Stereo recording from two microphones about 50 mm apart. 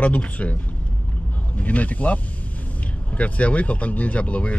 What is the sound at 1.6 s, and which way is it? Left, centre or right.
Speech, left.